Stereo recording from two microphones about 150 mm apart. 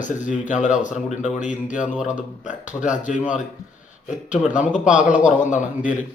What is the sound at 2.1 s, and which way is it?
Speech, 55° left (ahead or behind).